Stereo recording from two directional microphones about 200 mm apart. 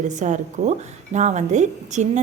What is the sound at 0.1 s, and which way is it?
A woman's voice, 35° right (ahead or behind).